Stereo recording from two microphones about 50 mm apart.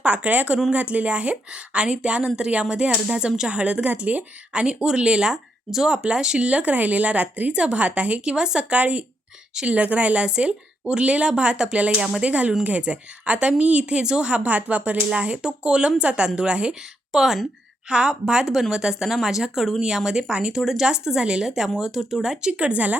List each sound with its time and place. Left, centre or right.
0.0 s a woman's voice: right
8.8 s a woman's voice: right
14.0 s a woman's voice: centre
17.1 s speech: centre
22.5 s a woman's voice: right